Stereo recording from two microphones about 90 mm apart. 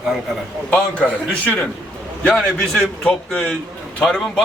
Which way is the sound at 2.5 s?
5° left (ahead or behind).